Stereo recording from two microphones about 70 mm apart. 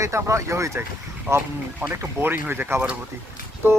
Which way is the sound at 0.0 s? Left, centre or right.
Right.